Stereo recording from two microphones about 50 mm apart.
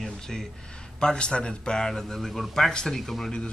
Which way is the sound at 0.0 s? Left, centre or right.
Centre.